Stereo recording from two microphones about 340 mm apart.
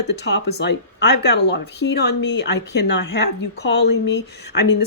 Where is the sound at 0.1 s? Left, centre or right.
Left.